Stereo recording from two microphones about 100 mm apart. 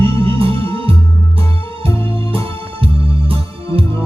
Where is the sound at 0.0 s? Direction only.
65° right (ahead or behind).